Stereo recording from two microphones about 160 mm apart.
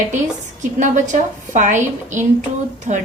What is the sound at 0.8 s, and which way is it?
A woman's voice, 50° right (ahead or behind).